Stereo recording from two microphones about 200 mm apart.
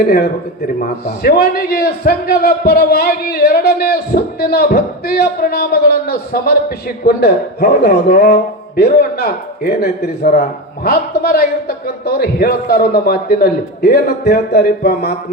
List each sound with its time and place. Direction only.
0.0 s a man's voice: 50° left (ahead or behind)